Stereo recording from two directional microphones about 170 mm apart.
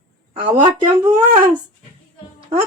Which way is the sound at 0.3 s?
30° right (ahead or behind).